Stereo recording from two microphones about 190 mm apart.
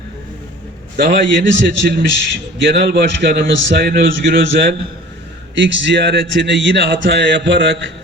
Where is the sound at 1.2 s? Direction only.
75° right (ahead or behind).